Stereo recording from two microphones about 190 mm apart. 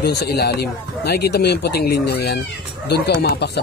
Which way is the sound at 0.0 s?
60° left (ahead or behind).